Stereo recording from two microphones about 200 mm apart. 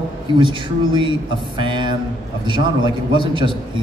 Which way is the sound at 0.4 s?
25° right (ahead or behind).